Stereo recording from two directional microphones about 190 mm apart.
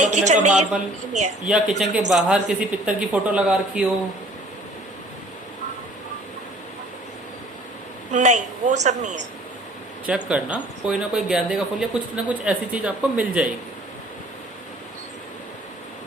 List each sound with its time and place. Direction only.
0.0 s a woman's voice: 40° right (ahead or behind)
1.5 s speech: 5° right (ahead or behind)
8.1 s a woman's voice: 40° right (ahead or behind)
10.1 s speech: 5° right (ahead or behind)